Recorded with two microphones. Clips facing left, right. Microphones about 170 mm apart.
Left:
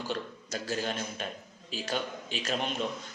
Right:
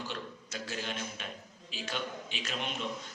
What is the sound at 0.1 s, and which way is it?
A man's voice, 40° left (ahead or behind).